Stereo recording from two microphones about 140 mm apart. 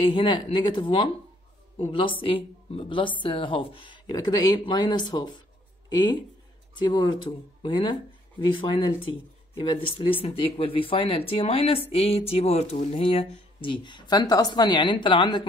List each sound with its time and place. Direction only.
0.0 s speech: 35° left (ahead or behind)
6.7 s speech: 30° left (ahead or behind)